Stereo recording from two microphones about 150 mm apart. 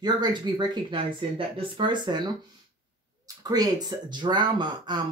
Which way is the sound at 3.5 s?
25° right (ahead or behind).